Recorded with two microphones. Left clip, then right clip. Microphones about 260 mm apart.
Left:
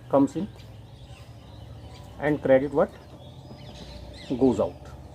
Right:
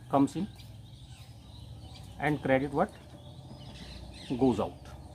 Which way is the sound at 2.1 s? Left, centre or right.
Right.